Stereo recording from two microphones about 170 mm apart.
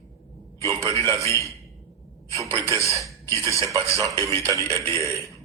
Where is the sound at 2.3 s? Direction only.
20° right (ahead or behind).